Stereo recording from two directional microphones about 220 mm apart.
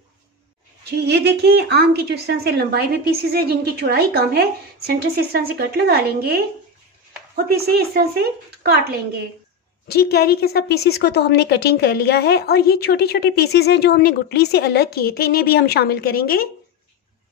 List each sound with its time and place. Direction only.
0.9 s a woman's voice: 50° right (ahead or behind)
7.5 s a woman's voice: 45° right (ahead or behind)
9.8 s a woman's voice: 45° left (ahead or behind)